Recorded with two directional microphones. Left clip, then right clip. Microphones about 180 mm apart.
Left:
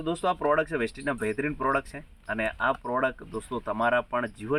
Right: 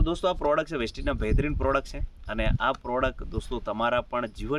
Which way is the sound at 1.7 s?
50° right (ahead or behind).